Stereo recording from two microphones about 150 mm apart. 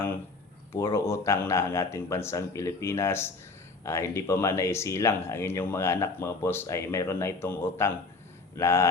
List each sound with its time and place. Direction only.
0.7 s speech: 20° left (ahead or behind)